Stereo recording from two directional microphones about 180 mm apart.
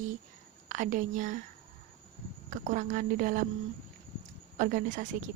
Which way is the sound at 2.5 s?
45° right (ahead or behind).